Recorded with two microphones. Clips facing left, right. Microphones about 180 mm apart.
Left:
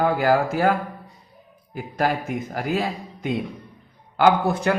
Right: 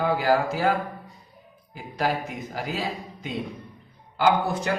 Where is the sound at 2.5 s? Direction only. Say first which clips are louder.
Left 6 dB; 50° left (ahead or behind).